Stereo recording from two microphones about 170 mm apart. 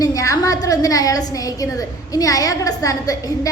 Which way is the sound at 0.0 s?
20° left (ahead or behind).